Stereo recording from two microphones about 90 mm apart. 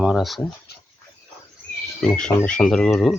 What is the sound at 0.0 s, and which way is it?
Speech, 5° right (ahead or behind).